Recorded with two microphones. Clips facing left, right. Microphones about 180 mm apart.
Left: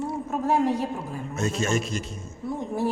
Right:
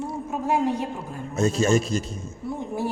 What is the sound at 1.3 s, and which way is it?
Speech, 35° right (ahead or behind).